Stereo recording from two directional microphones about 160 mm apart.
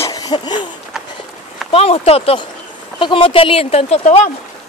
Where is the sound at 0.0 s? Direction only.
25° left (ahead or behind).